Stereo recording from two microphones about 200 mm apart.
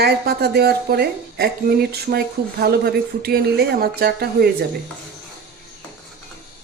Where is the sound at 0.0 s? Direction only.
55° right (ahead or behind).